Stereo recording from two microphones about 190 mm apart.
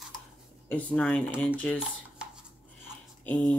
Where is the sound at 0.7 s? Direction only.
5° left (ahead or behind).